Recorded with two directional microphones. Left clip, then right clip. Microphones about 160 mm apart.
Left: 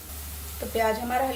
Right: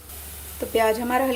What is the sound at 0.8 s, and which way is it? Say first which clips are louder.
Speech: right 4 dB; 55° right (ahead or behind).